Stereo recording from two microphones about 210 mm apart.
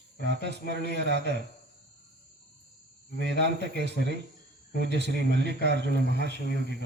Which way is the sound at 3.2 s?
55° right (ahead or behind).